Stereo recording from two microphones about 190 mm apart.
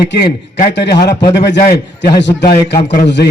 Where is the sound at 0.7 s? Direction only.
60° left (ahead or behind).